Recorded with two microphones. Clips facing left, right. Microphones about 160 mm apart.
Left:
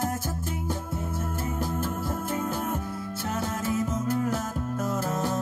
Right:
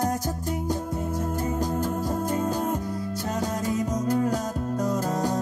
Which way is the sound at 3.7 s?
40° right (ahead or behind).